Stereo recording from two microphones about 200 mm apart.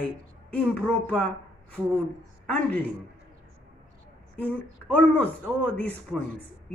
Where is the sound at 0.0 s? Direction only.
5° left (ahead or behind).